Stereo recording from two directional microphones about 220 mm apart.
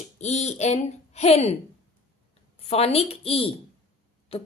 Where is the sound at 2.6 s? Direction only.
30° left (ahead or behind).